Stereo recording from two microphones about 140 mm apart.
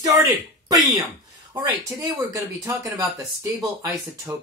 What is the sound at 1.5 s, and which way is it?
Speech, 25° right (ahead or behind).